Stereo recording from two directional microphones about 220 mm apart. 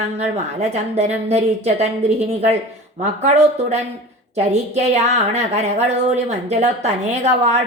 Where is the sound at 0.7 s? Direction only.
30° right (ahead or behind).